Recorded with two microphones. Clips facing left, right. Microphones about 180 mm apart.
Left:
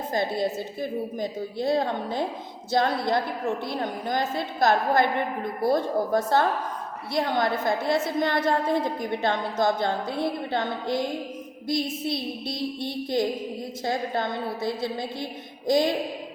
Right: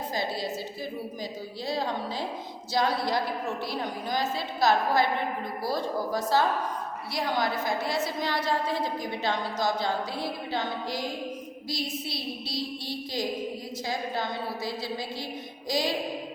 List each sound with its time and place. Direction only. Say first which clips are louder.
0.1 s a woman's voice: left 7 dB; 55° left (ahead or behind)